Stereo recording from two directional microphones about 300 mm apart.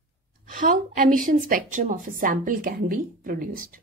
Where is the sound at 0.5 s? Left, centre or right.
Right.